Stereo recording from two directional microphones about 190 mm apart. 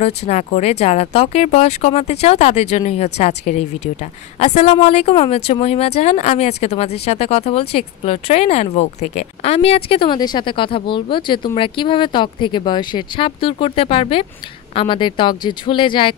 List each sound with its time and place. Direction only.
0.0 s speech: 35° left (ahead or behind)